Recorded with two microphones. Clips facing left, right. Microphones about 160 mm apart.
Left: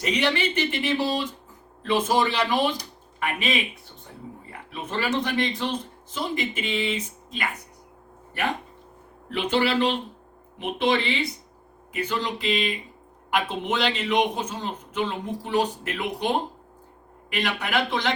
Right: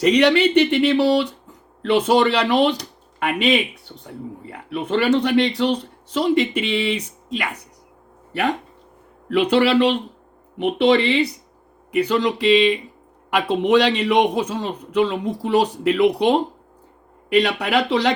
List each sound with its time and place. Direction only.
0.0 s speech: 70° right (ahead or behind)
9.3 s speech: 70° right (ahead or behind)